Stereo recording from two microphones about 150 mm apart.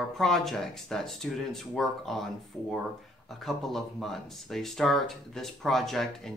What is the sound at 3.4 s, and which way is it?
Speech, centre (ahead or behind).